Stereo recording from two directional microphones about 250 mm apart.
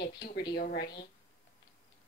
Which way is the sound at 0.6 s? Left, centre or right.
Left.